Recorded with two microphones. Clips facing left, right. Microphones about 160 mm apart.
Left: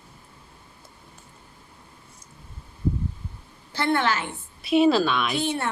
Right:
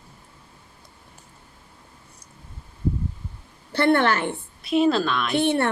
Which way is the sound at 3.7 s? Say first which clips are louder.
Right 4 dB; 60° right (ahead or behind).